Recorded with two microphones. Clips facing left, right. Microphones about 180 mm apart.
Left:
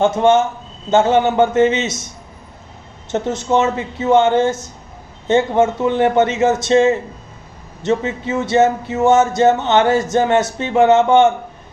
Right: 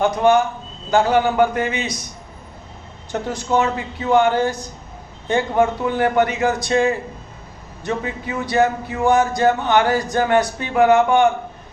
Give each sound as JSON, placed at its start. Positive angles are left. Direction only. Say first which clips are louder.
{"t": 0.0, "sound": "speech", "louder": "left 2 dB", "side_deg": 25}
{"t": 3.1, "sound": "speech", "louder": "left 4 dB", "side_deg": 20}